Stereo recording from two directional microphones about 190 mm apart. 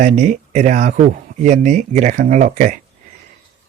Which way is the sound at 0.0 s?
40° right (ahead or behind).